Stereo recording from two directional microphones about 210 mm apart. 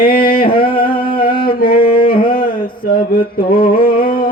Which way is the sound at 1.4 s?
45° left (ahead or behind).